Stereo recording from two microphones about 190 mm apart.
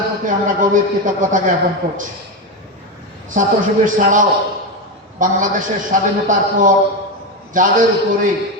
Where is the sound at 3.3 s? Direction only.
40° right (ahead or behind).